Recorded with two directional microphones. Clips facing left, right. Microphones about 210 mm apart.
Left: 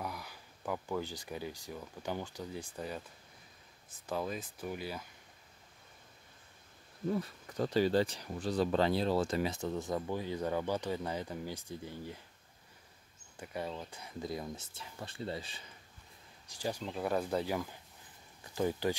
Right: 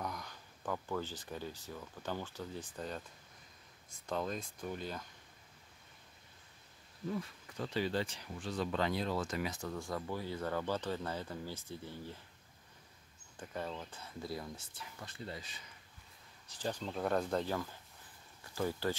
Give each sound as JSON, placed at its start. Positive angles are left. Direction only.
{"t": 0.0, "sound": "speech", "side_deg": 5}
{"t": 4.0, "sound": "speech", "side_deg": 5}
{"t": 7.1, "sound": "speech", "side_deg": 40}
{"t": 13.4, "sound": "speech", "side_deg": 10}
{"t": 16.4, "sound": "speech", "side_deg": 10}